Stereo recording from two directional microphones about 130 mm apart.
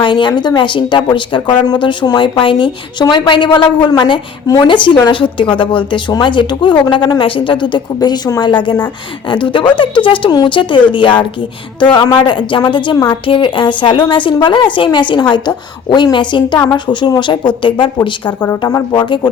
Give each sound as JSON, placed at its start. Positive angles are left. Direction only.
{"t": 0.0, "sound": "a woman's voice", "side_deg": 35}